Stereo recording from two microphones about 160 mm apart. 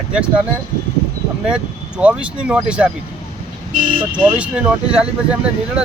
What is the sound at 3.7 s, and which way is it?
Speech, 60° right (ahead or behind).